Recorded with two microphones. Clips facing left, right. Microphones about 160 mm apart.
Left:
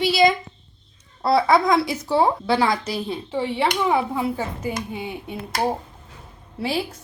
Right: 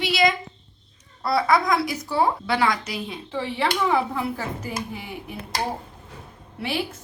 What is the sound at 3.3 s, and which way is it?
Speech, 20° left (ahead or behind).